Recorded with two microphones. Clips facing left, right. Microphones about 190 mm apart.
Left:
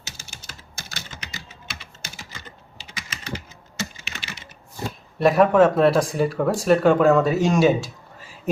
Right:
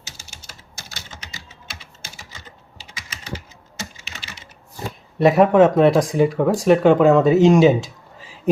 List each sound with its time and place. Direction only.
0.8 s typing: 60° left (ahead or behind)
5.2 s speech: 20° right (ahead or behind)